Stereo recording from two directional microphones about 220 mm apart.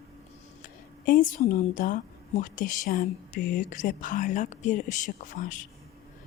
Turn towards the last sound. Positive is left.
turn(degrees=35)  # may be behind; listen again after turning